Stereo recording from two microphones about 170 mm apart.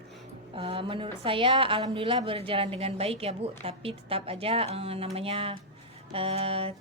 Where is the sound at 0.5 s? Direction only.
35° right (ahead or behind).